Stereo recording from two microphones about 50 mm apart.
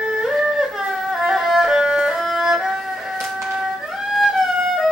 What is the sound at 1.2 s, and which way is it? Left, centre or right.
Music, centre.